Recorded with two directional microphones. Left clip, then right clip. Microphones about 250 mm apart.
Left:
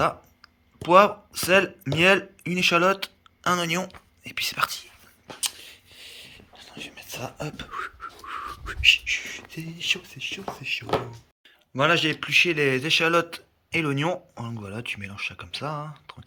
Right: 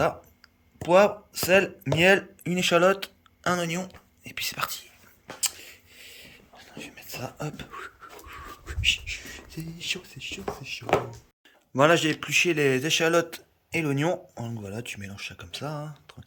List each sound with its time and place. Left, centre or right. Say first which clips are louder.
0.8 s speech: left 3 dB; centre
5.4 s whispering: left 1 dB; centre
10.6 s speech: left 8 dB; centre
11.7 s a man's voice: right 1 dB; centre